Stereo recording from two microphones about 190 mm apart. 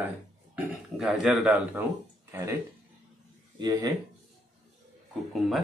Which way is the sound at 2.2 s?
15° right (ahead or behind).